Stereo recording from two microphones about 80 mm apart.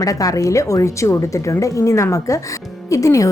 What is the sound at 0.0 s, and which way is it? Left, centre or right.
A woman's voice, left.